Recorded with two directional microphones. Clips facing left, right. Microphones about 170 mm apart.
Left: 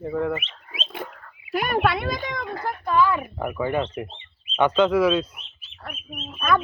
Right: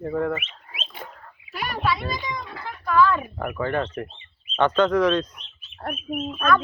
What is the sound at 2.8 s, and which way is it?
Speech, 25° left (ahead or behind).